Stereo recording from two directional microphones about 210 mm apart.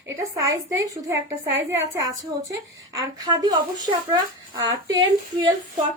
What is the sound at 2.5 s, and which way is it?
A woman's voice, 15° right (ahead or behind).